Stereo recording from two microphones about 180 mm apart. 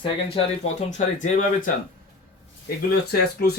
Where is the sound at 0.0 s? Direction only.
30° left (ahead or behind).